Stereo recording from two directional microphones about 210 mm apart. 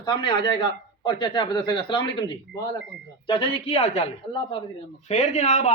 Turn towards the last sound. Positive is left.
turn(degrees=35)  # may be behind; listen again after turning